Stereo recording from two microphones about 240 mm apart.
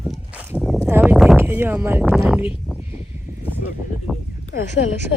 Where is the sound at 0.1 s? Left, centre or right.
Centre.